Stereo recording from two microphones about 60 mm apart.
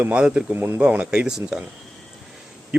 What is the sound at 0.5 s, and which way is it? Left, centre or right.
Speech, right.